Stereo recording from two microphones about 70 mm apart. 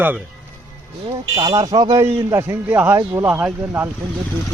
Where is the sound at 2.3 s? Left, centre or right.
Right.